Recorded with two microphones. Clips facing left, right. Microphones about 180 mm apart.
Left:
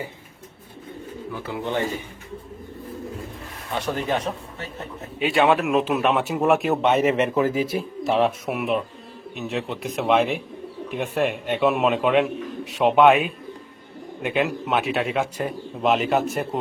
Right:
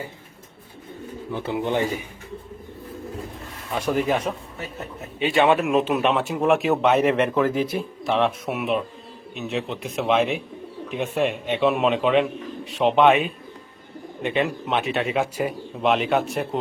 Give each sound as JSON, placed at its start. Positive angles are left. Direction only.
{"t": 1.4, "sound": "speech", "side_deg": -25}
{"t": 3.8, "sound": "speech", "side_deg": -10}
{"t": 5.2, "sound": "speech", "side_deg": 0}